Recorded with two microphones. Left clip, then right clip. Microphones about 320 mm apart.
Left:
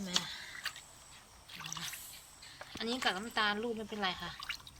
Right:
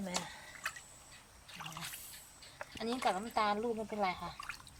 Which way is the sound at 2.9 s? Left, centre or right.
Centre.